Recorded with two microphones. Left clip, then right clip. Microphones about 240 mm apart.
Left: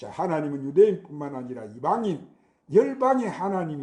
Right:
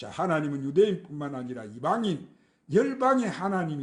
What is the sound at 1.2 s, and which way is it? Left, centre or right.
Speech, right.